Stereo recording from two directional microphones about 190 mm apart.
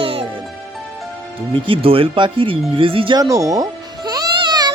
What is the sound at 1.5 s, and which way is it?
Music, 25° right (ahead or behind).